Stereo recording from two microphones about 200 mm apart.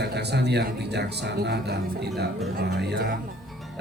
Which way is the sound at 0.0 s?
55° right (ahead or behind).